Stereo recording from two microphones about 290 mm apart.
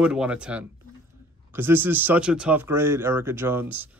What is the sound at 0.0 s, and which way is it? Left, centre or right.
Speech, centre.